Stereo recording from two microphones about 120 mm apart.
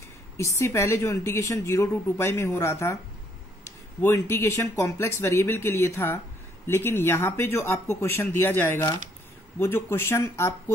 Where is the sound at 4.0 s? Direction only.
20° left (ahead or behind).